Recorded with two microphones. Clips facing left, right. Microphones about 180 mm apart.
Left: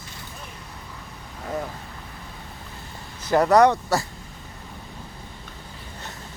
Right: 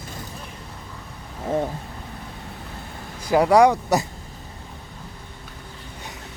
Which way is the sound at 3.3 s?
10° right (ahead or behind).